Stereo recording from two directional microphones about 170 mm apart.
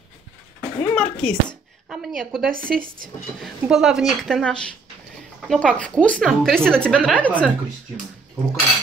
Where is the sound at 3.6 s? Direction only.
5° right (ahead or behind).